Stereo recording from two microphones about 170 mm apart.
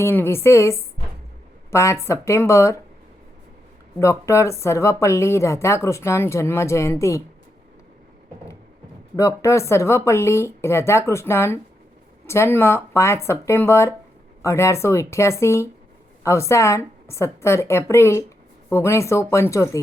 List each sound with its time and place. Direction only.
0.0 s speech: 15° left (ahead or behind)
4.0 s speech: 15° left (ahead or behind)
9.1 s speech: 20° left (ahead or behind)